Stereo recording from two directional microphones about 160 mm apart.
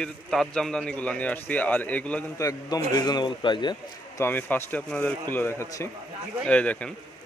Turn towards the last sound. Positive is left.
turn(degrees=10)  # may be behind; listen again after turning